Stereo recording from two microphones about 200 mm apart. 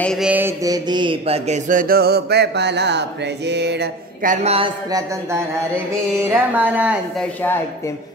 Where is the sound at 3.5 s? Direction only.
60° right (ahead or behind).